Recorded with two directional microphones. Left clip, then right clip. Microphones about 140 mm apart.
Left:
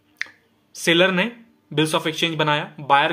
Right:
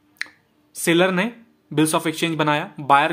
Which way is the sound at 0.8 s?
25° right (ahead or behind).